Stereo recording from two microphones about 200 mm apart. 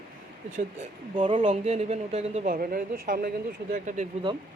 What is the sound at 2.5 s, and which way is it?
Speech, 45° right (ahead or behind).